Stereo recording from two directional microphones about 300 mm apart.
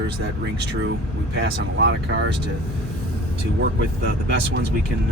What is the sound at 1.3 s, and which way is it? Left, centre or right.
Speech, right.